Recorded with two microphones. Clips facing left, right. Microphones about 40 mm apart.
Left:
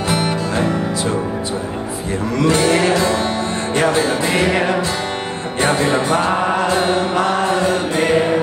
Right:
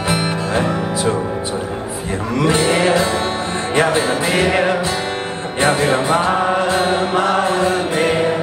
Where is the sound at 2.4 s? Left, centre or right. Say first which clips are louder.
Even; right.